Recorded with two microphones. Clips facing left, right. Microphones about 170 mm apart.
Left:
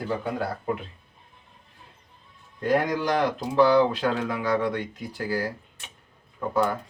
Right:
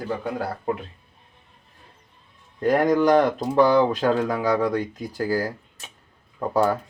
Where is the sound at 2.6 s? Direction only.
50° right (ahead or behind).